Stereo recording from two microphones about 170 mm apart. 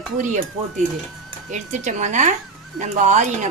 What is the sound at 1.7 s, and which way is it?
Speech, 45° right (ahead or behind).